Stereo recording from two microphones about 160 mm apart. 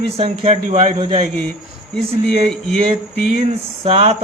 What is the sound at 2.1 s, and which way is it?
Speech, 40° right (ahead or behind).